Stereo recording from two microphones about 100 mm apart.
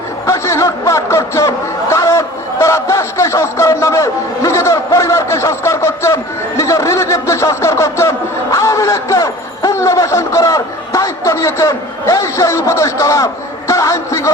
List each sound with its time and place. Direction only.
0.3 s speech: 30° left (ahead or behind)